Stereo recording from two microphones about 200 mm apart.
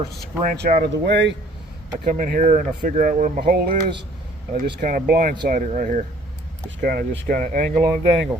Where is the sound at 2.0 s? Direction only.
45° right (ahead or behind).